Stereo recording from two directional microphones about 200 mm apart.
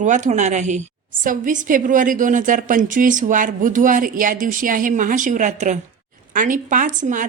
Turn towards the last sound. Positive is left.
turn(degrees=-40)  # may be behind; listen again after turning